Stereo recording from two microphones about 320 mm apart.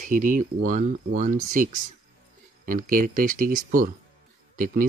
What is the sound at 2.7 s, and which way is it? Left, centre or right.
Speech, right.